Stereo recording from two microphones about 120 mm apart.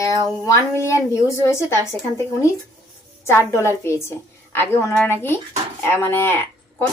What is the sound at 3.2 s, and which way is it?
A woman's voice, 20° left (ahead or behind).